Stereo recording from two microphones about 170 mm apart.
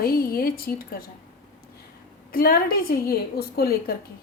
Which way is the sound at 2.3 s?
60° left (ahead or behind).